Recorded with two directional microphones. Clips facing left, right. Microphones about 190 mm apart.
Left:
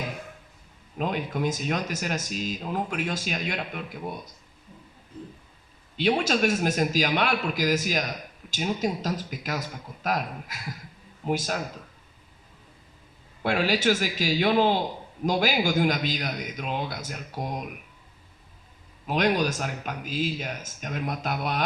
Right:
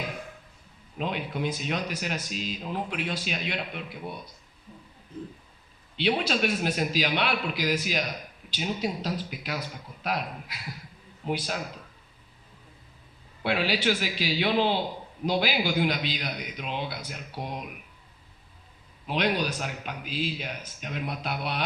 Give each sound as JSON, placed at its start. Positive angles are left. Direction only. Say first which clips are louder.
{"t": 0.9, "sound": "speech", "louder": "left 3 dB", "side_deg": 45}
{"t": 6.0, "sound": "speech", "louder": "left 3 dB", "side_deg": 45}
{"t": 13.4, "sound": "speech", "louder": "left 2 dB", "side_deg": 45}
{"t": 19.0, "sound": "speech", "louder": "left 3 dB", "side_deg": 45}